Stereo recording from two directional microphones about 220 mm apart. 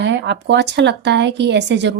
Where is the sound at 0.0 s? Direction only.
55° right (ahead or behind).